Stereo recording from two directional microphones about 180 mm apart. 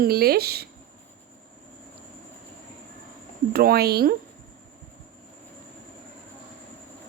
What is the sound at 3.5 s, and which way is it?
Speech, 60° right (ahead or behind).